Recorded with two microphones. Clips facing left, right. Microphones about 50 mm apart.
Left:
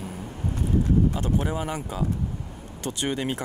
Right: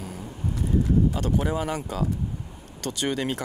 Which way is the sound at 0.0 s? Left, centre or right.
Centre.